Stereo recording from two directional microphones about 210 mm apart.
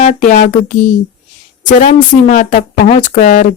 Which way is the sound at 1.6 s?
35° left (ahead or behind).